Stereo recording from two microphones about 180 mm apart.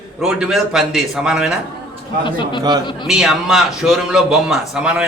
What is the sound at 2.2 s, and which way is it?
Speech, 25° left (ahead or behind).